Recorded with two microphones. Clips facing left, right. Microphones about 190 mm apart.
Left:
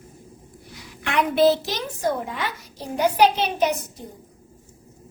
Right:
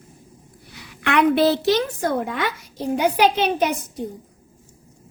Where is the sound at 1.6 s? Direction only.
60° right (ahead or behind).